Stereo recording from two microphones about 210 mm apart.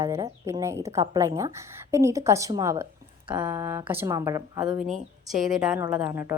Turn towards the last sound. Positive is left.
turn(degrees=-10)  # may be behind; listen again after turning